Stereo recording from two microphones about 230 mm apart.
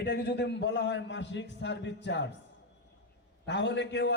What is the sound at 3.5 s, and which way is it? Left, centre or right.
Speech, left.